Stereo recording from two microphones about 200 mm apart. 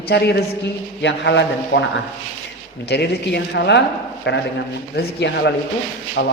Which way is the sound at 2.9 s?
55° left (ahead or behind).